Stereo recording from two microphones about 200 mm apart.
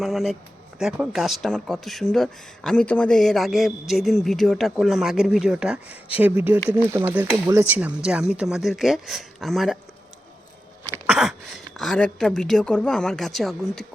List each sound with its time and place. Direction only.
0.0 s speech: centre (ahead or behind)
11.0 s a sound: 5° right (ahead or behind)
11.8 s speech: 5° left (ahead or behind)